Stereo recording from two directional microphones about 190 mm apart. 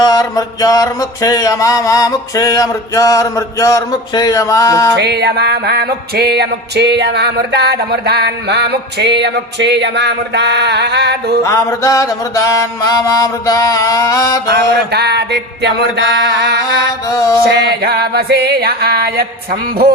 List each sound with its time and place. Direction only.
0.0 s mantra: 20° left (ahead or behind)
4.9 s music: 60° right (ahead or behind)
11.4 s mantra: 15° left (ahead or behind)
14.5 s music: 60° right (ahead or behind)
17.1 s mantra: 15° left (ahead or behind)
17.6 s music: 60° right (ahead or behind)